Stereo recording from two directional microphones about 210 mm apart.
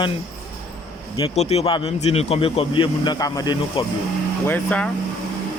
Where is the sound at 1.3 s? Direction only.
30° left (ahead or behind).